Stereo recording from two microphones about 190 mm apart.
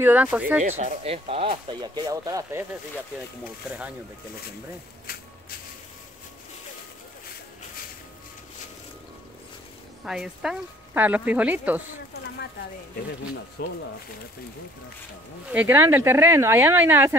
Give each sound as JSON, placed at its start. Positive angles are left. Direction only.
{"t": 0.0, "sound": "speech", "side_deg": -10}
{"t": 0.7, "sound": "speech", "side_deg": -35}
{"t": 10.0, "sound": "speech", "side_deg": 0}
{"t": 13.6, "sound": "speech", "side_deg": 60}
{"t": 15.5, "sound": "speech", "side_deg": -10}